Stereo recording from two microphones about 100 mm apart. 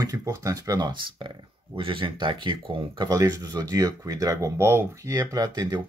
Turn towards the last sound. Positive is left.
turn(degrees=-40)  # may be behind; listen again after turning